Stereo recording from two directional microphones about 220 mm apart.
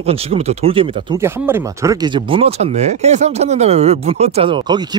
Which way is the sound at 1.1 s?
10° right (ahead or behind).